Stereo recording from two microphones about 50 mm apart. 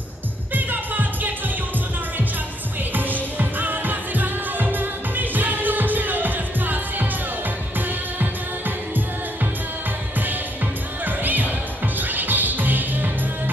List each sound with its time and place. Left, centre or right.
0.6 s music: right
2.9 s music: right
8.2 s music: right
11.1 s music: right